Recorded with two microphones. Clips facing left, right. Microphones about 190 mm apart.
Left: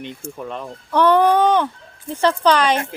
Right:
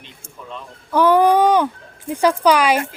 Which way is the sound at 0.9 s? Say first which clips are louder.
Right 1 dB; 10° right (ahead or behind).